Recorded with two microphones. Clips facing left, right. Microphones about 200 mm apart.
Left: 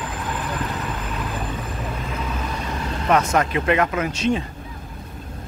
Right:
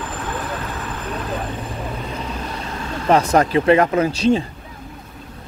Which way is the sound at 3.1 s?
35° right (ahead or behind).